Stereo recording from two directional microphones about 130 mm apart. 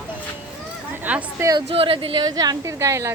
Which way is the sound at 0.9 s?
10° right (ahead or behind).